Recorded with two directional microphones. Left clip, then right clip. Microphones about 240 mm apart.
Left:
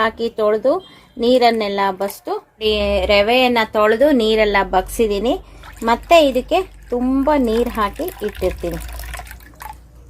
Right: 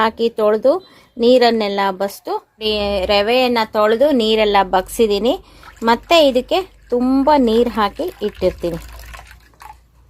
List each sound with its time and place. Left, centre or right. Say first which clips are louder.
0.0 s a woman's voice: right 2 dB; right
8.9 s liquid: left 5 dB; centre